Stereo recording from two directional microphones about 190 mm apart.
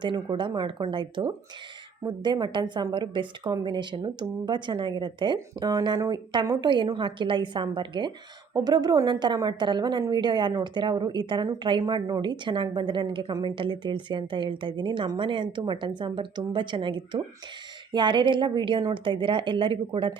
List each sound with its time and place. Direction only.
0.0 s a woman's voice: 25° right (ahead or behind)